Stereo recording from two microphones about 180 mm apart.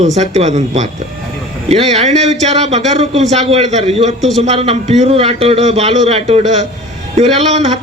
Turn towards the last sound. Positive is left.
turn(degrees=-40)  # may be behind; listen again after turning